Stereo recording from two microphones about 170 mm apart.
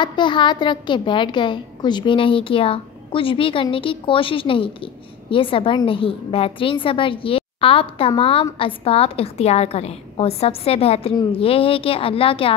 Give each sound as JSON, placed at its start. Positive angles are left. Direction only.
{"t": 0.0, "sound": "a woman's voice", "side_deg": 25}